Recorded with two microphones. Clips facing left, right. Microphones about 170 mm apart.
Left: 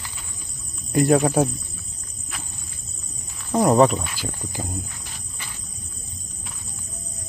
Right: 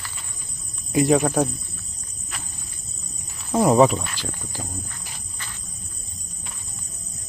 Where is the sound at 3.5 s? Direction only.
5° right (ahead or behind).